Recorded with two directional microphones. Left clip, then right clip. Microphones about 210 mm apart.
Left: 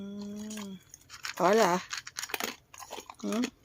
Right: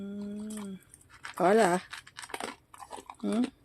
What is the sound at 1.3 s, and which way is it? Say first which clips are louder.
Speech: even; 5° right (ahead or behind).